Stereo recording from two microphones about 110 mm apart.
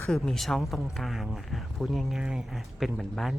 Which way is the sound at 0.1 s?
5° left (ahead or behind).